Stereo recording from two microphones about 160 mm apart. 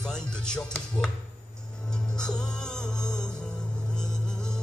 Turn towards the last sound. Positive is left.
turn(degrees=5)  # may be behind; listen again after turning